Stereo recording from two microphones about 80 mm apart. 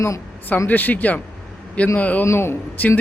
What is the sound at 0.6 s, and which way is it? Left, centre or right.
A man's voice, left.